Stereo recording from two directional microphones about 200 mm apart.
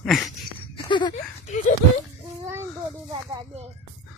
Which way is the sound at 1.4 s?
40° left (ahead or behind).